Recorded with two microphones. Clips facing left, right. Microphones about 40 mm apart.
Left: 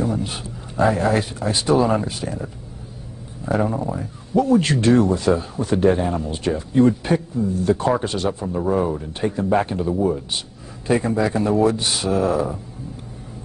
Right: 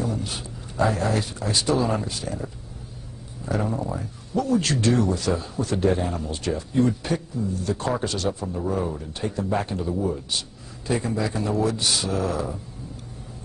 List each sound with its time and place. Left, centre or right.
0.0 s a sound: left
1.5 s a man's voice: centre
3.4 s a man's voice: left